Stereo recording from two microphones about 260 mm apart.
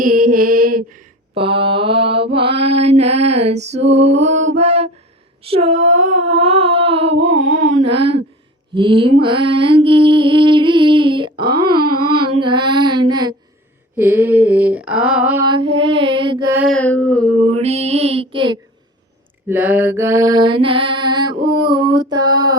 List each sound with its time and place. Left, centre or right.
0.0 s mantra: right
3.0 s humming: right
4.5 s mantra: right
5.4 s humming: right
7.5 s a sound: right
8.7 s mantra: centre
16.6 s a sound: centre
17.5 s humming: right
19.5 s mantra: centre